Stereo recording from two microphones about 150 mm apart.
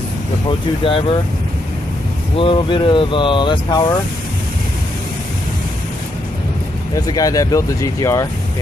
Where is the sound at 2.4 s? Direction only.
35° left (ahead or behind).